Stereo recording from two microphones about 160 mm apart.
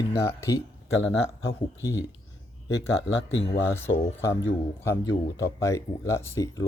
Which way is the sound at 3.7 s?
15° left (ahead or behind).